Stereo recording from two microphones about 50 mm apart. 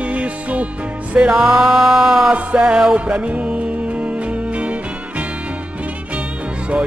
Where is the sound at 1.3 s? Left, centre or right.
Centre.